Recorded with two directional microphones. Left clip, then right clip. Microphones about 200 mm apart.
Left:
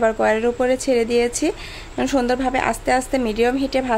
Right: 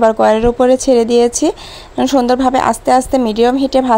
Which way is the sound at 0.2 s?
25° right (ahead or behind).